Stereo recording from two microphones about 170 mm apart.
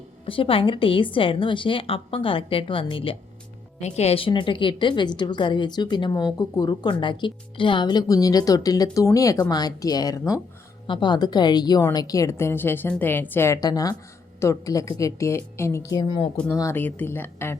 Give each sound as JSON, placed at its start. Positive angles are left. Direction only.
{"t": 0.3, "sound": "a woman's voice", "side_deg": 30}